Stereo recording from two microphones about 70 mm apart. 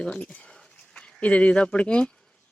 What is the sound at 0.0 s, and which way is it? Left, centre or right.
Speech, centre.